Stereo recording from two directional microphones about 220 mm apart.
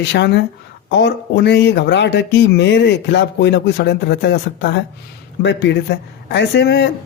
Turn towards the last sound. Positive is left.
turn(degrees=50)  # may be behind; listen again after turning